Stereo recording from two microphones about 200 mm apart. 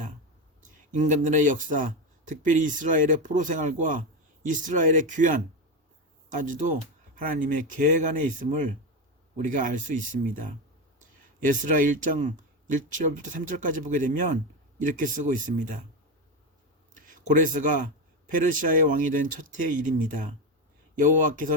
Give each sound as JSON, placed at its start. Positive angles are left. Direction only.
{"t": 0.6, "sound": "speech", "side_deg": -40}
{"t": 16.9, "sound": "speech", "side_deg": -40}